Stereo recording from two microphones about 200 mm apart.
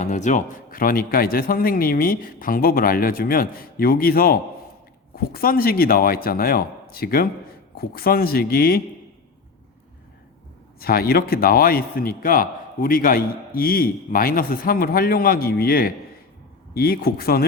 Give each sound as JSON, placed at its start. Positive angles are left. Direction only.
{"t": 0.0, "sound": "speech", "side_deg": 35}
{"t": 10.8, "sound": "speech", "side_deg": 50}